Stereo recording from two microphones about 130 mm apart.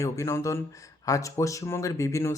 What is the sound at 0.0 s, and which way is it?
Speech, 20° left (ahead or behind).